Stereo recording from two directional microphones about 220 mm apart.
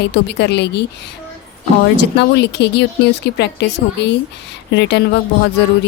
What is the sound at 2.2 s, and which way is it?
Speech, 50° left (ahead or behind).